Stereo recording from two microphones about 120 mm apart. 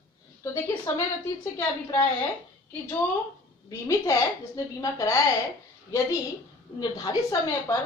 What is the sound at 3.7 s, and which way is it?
A woman's voice, 25° left (ahead or behind).